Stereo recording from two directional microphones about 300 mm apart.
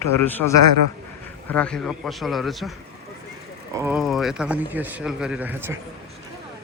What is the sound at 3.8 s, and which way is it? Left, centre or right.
Speech, centre.